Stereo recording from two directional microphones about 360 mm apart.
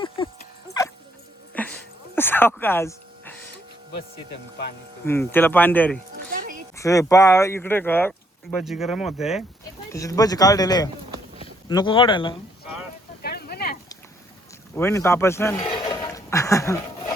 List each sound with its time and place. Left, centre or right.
1.5 s a sound: centre
5.0 s speech: centre
6.1 s music: right
6.7 s speech: centre
13.2 s a sound: left
14.8 s speech: centre